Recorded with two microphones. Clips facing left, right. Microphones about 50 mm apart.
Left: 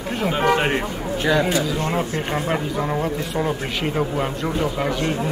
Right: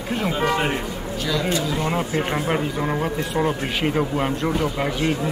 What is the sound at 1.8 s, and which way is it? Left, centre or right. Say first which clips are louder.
Speech: even; centre.